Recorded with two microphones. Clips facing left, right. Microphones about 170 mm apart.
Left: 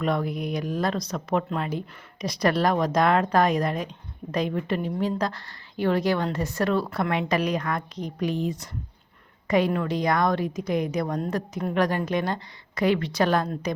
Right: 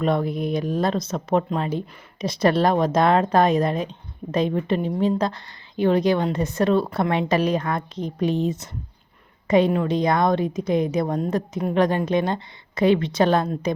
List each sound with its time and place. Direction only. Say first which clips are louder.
0.0 s a woman's voice: right 4 dB; 25° right (ahead or behind)